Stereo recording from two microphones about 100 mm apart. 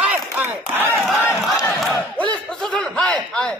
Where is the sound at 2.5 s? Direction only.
5° left (ahead or behind).